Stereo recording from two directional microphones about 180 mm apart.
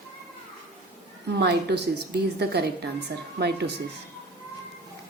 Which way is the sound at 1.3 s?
70° right (ahead or behind).